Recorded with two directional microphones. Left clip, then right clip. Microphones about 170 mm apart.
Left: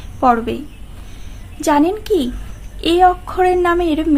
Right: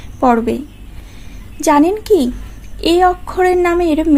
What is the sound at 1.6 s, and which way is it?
A child's voice, 20° right (ahead or behind).